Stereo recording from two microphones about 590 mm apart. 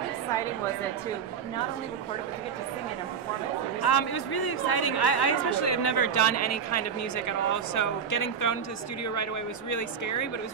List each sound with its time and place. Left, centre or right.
3.8 s a woman's voice: left